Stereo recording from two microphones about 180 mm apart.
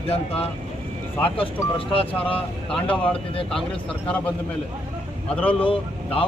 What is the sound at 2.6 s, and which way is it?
Speech, 5° left (ahead or behind).